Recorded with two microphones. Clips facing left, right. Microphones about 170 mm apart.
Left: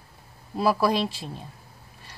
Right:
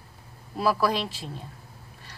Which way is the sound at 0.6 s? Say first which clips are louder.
Left 2 dB; 20° left (ahead or behind).